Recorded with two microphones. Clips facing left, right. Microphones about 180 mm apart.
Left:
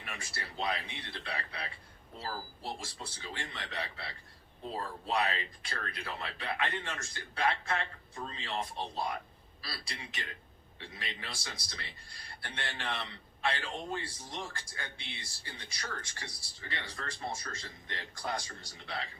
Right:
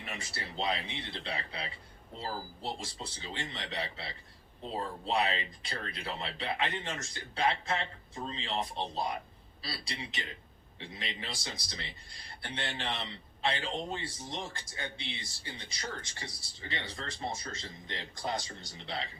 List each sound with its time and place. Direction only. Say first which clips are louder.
0.0 s a man's voice: right 2 dB; 20° right (ahead or behind)